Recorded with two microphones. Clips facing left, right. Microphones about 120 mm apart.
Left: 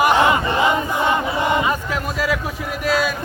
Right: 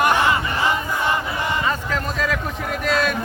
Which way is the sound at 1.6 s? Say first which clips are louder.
Left 2 dB; 10° left (ahead or behind).